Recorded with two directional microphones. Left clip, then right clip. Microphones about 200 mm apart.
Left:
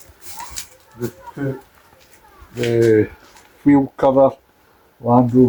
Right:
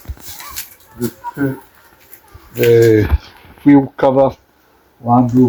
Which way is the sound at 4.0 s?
30° right (ahead or behind).